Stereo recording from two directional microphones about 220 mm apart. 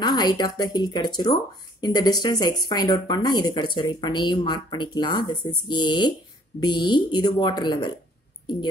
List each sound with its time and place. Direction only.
0.0 s speech: 20° left (ahead or behind)